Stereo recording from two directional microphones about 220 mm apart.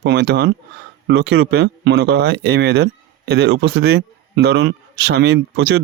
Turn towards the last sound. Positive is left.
turn(degrees=-50)  # may be behind; listen again after turning